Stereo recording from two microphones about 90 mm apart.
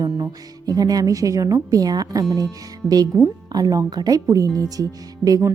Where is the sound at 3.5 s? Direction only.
45° right (ahead or behind).